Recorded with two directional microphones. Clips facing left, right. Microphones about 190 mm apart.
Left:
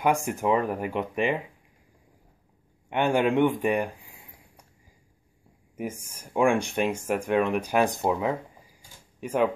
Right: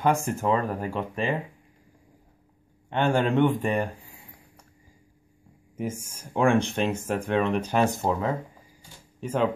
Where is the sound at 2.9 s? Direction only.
15° left (ahead or behind).